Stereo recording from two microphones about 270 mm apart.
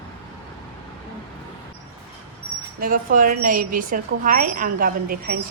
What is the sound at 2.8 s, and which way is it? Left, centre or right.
Speech, right.